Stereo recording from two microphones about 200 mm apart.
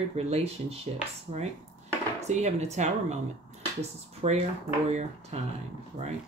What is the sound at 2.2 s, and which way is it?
Speech, 35° right (ahead or behind).